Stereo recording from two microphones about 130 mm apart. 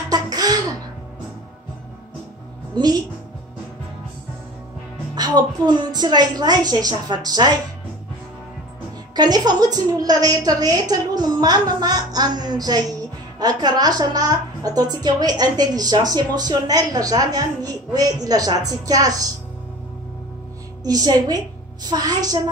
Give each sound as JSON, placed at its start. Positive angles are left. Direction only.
{"t": 0.1, "sound": "a sound", "side_deg": -30}
{"t": 2.7, "sound": "a woman's voice", "side_deg": -30}
{"t": 5.1, "sound": "a woman's voice", "side_deg": -30}
{"t": 9.1, "sound": "a woman's voice", "side_deg": -30}
{"t": 20.8, "sound": "a woman's voice", "side_deg": -30}